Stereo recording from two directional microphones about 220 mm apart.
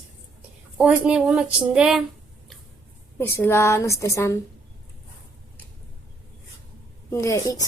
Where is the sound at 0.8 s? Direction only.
5° right (ahead or behind).